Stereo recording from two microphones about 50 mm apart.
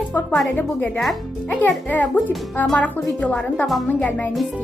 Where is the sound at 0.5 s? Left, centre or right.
Left.